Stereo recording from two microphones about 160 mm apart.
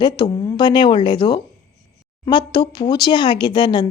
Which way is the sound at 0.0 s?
25° left (ahead or behind).